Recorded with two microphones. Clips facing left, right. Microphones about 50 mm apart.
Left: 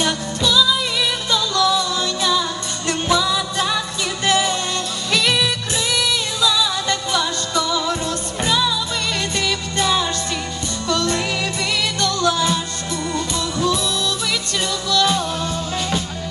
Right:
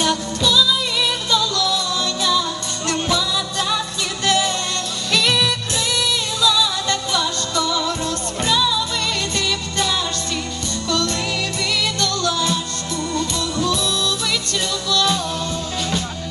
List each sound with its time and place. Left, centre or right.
0.0 s music: centre
14.8 s music: centre